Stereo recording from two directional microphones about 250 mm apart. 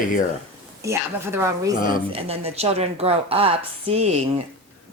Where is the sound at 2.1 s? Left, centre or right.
Right.